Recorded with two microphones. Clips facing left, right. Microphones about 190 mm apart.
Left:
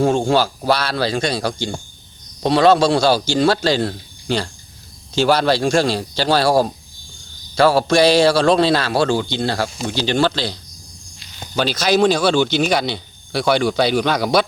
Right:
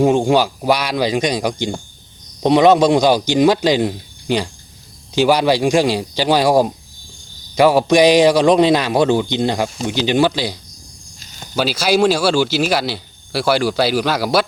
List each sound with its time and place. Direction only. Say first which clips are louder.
0.0 s a man's voice: right 2 dB; 15° right (ahead or behind)